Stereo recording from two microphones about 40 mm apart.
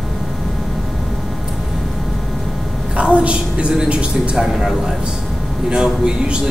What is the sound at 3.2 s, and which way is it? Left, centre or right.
A man's voice, right.